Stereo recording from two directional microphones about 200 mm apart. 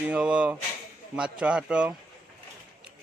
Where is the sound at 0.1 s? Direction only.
5° right (ahead or behind).